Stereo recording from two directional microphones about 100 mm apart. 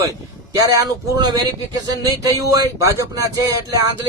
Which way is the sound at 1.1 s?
45° right (ahead or behind).